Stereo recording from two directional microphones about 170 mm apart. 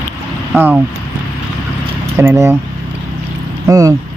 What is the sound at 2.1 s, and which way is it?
Speech, 15° right (ahead or behind).